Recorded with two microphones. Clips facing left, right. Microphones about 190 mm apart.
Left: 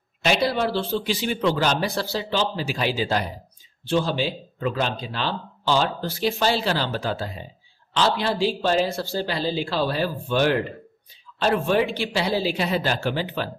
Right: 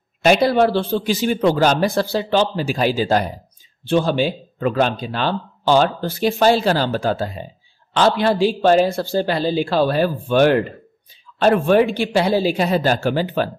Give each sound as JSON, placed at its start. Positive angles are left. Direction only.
{"t": 0.2, "sound": "speech", "side_deg": -50}
{"t": 3.8, "sound": "speech", "side_deg": -55}